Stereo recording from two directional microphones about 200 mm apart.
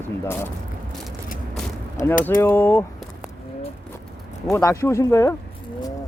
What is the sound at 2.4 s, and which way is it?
Speech, 10° left (ahead or behind).